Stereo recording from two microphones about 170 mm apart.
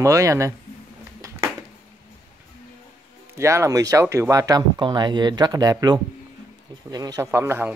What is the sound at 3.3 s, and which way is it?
A man's voice, 15° right (ahead or behind).